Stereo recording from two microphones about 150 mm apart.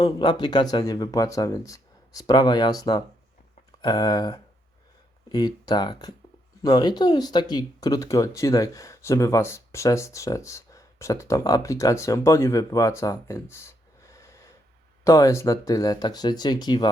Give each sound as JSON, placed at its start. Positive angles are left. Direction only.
{"t": 0.0, "sound": "speech", "side_deg": 30}